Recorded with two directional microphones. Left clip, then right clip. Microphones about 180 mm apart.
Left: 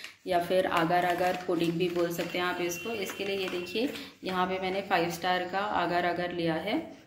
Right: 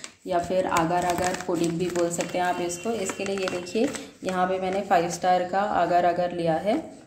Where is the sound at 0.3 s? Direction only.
25° right (ahead or behind).